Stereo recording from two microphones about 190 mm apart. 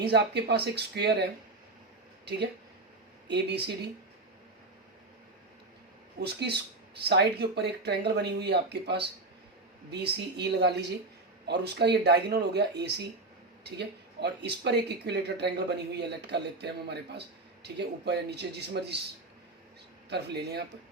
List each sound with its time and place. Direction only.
0.0 s speech: 60° right (ahead or behind)
3.2 s speech: 60° right (ahead or behind)
6.1 s speech: 60° right (ahead or behind)
20.1 s speech: 60° right (ahead or behind)